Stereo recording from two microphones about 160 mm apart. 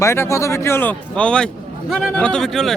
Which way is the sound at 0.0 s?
15° left (ahead or behind).